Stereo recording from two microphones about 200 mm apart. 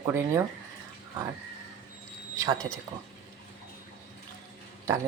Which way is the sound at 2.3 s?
15° right (ahead or behind).